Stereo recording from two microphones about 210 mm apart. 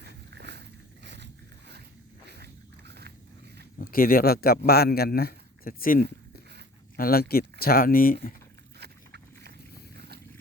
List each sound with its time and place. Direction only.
0.0 s a sound: 55° right (ahead or behind)
3.8 s a man's voice: 45° left (ahead or behind)
8.8 s vehicle: 50° right (ahead or behind)